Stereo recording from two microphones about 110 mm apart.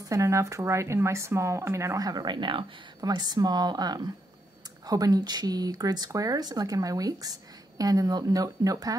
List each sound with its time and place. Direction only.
0.1 s speech: 30° right (ahead or behind)